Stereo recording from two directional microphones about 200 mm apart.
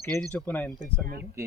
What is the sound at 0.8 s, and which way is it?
Speech, 50° right (ahead or behind).